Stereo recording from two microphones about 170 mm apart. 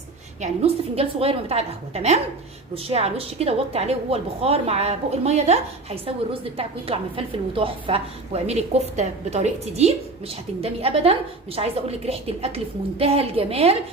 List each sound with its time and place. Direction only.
0.4 s a woman's voice: 35° right (ahead or behind)